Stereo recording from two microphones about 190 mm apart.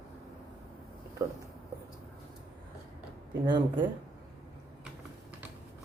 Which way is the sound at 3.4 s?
25° right (ahead or behind).